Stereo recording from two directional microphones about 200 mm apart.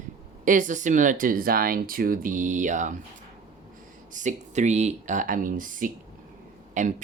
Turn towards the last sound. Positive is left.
turn(degrees=-40)  # may be behind; listen again after turning